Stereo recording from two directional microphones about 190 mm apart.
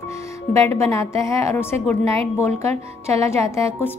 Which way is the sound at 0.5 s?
15° left (ahead or behind).